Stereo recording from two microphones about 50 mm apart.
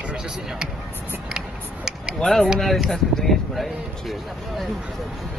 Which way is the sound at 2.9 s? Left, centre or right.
Centre.